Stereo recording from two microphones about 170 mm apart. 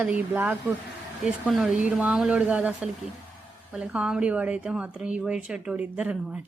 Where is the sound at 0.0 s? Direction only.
10° right (ahead or behind).